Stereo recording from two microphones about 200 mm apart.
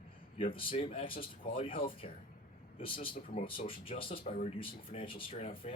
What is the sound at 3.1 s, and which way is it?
Speech, 45° left (ahead or behind).